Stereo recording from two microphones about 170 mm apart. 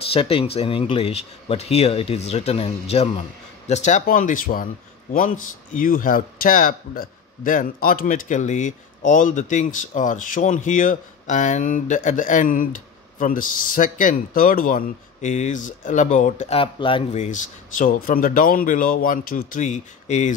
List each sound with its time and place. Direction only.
0.1 s speech: 35° left (ahead or behind)
17.2 s speech: 50° left (ahead or behind)